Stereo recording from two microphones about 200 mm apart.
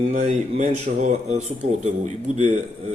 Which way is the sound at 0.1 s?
40° right (ahead or behind).